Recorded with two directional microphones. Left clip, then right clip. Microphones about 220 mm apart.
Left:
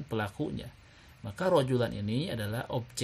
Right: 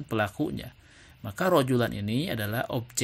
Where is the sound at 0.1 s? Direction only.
20° right (ahead or behind).